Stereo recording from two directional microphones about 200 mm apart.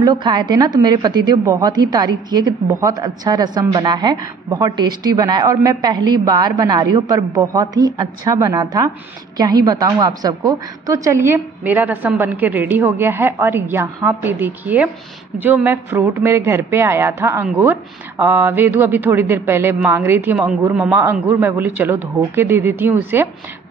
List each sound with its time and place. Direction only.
0.0 s a woman's voice: 20° right (ahead or behind)